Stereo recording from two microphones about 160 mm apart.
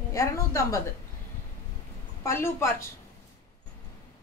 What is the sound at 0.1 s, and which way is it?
Speech, 20° left (ahead or behind).